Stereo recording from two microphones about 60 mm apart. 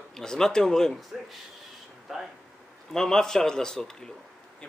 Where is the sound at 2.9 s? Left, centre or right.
Centre.